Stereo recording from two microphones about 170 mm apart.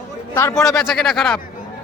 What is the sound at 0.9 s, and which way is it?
Speech, centre (ahead or behind).